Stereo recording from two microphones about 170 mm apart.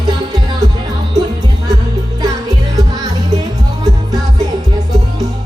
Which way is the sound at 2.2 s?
20° right (ahead or behind).